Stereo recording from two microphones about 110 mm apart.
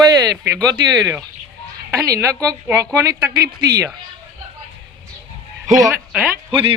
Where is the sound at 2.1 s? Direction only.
30° right (ahead or behind).